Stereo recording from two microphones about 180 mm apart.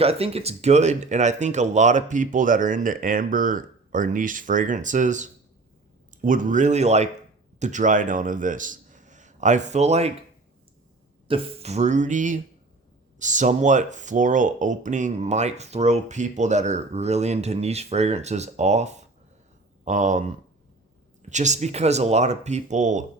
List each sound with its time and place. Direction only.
0.0 s speech: 35° right (ahead or behind)
11.3 s speech: 35° right (ahead or behind)